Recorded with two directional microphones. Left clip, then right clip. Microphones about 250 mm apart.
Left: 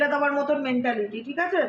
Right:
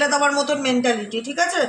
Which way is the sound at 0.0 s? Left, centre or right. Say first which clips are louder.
Right 4 dB; right.